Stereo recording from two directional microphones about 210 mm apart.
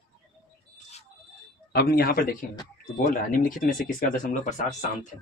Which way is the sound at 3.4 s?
40° left (ahead or behind).